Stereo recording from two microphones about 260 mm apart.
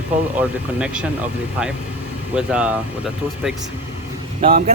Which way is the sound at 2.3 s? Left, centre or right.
Centre.